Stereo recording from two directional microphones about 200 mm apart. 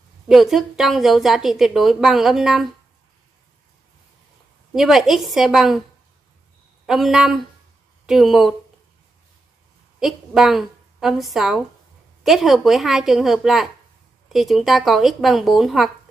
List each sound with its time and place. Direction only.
0.3 s a woman's voice: centre (ahead or behind)
4.7 s a woman's voice: centre (ahead or behind)
6.9 s a woman's voice: centre (ahead or behind)
9.9 s a woman's voice: centre (ahead or behind)